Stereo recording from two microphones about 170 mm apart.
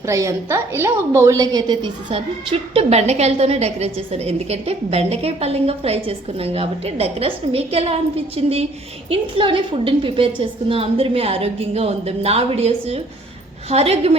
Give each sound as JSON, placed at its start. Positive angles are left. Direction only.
{"t": 0.0, "sound": "a woman's voice", "side_deg": -20}